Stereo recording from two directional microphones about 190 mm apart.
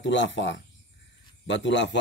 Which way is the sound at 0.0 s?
70° left (ahead or behind).